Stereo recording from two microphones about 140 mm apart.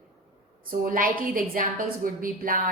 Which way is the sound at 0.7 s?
85° right.